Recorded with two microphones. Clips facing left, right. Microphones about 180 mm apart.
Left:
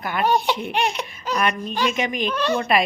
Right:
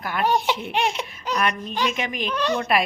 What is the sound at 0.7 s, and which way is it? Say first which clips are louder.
Laughter: left 1 dB; 25° right (ahead or behind).